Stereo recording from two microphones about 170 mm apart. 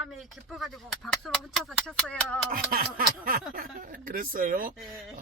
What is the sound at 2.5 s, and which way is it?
Speech, 55° right (ahead or behind).